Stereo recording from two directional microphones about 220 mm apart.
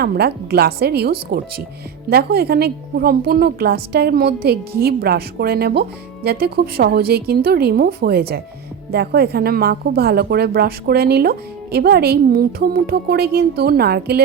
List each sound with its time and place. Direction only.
0.0 s a woman's voice: 45° right (ahead or behind)